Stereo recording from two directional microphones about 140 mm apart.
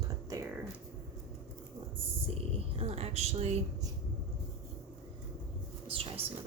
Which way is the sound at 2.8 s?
45° right (ahead or behind).